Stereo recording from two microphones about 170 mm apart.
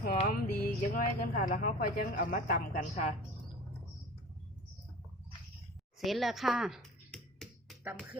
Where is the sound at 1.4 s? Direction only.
50° left (ahead or behind).